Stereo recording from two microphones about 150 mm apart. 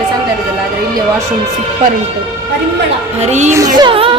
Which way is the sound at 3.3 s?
50° right (ahead or behind).